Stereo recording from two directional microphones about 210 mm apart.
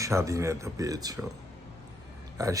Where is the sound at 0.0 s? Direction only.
15° right (ahead or behind).